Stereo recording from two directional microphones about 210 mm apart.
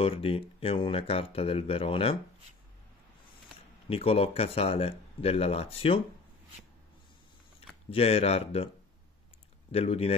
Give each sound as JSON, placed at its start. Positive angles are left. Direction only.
{"t": 0.0, "sound": "speech", "side_deg": 25}
{"t": 3.9, "sound": "speech", "side_deg": 25}
{"t": 7.9, "sound": "speech", "side_deg": 30}
{"t": 9.7, "sound": "speech", "side_deg": 30}